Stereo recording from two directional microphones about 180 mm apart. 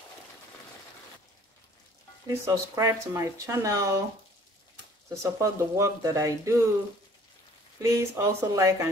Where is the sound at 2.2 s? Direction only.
15° right (ahead or behind).